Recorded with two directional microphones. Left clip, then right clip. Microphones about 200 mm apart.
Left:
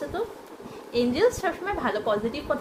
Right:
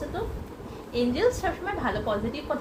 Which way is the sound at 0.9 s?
40° left (ahead or behind).